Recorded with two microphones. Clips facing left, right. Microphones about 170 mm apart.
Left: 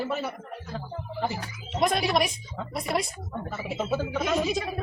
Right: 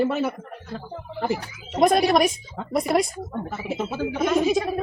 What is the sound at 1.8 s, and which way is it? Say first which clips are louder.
A woman's voice: right 7 dB; 45° right (ahead or behind).